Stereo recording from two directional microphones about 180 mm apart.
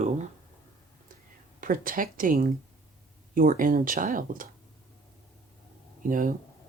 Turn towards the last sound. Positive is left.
turn(degrees=-50)  # may be behind; listen again after turning